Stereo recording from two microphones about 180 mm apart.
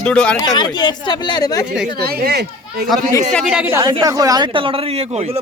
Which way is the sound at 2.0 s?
60° right (ahead or behind).